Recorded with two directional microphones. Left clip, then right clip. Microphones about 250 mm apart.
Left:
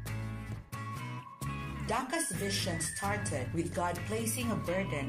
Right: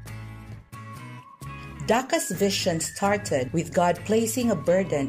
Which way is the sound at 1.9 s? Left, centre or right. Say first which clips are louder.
Right 11 dB; right.